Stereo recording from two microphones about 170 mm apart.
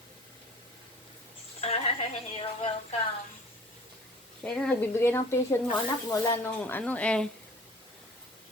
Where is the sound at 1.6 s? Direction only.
35° left (ahead or behind).